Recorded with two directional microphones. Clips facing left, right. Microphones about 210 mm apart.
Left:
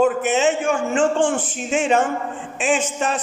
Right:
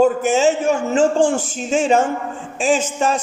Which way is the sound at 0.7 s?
40° right (ahead or behind).